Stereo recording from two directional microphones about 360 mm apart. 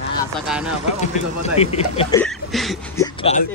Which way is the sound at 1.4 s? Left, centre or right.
Centre.